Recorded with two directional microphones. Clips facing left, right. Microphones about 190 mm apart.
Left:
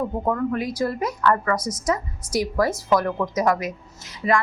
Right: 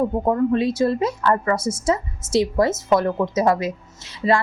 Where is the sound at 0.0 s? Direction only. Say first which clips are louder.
Right 4 dB; 25° right (ahead or behind).